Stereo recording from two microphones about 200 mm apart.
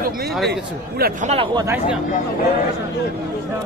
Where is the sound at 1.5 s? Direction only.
15° right (ahead or behind).